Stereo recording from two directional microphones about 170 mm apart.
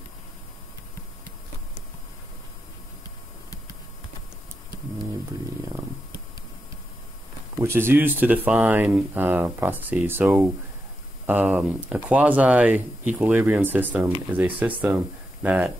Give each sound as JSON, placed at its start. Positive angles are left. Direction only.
{"t": 7.6, "sound": "speech", "side_deg": -15}